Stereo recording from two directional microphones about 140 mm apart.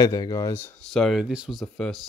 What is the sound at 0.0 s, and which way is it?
Speech, 25° left (ahead or behind).